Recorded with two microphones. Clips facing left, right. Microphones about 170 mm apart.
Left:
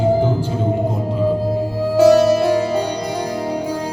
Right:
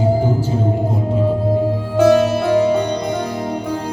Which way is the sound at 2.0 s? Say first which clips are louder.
Left 2 dB; 55° right (ahead or behind).